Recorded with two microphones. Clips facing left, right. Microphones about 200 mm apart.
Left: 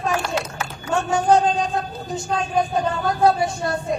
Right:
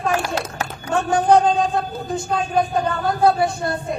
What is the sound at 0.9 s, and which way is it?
Speech, 55° right (ahead or behind).